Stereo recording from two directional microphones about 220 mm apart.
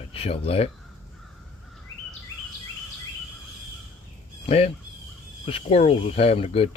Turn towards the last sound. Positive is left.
turn(degrees=25)  # may be behind; listen again after turning